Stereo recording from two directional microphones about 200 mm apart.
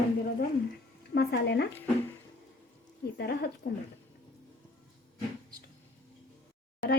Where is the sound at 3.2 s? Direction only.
55° left (ahead or behind).